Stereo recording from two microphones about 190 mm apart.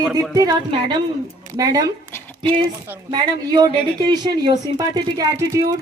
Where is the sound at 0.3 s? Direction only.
20° right (ahead or behind).